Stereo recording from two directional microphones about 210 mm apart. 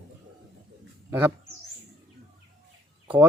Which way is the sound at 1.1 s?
10° right (ahead or behind).